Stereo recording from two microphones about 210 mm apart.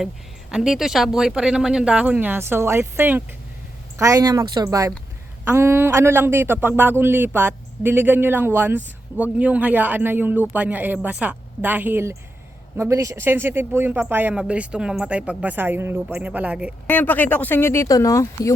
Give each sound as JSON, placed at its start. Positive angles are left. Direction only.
{"t": 0.5, "sound": "speech", "side_deg": 0}
{"t": 16.8, "sound": "speech", "side_deg": 10}